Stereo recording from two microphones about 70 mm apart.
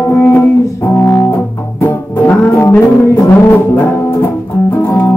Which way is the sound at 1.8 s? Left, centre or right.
Left.